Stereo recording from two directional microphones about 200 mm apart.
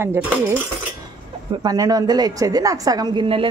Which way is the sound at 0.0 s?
10° right (ahead or behind).